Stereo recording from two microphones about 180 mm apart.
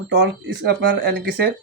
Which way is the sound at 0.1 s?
70° right (ahead or behind).